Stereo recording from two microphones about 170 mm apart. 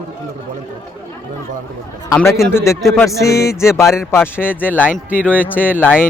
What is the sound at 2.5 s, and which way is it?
Music, 15° left (ahead or behind).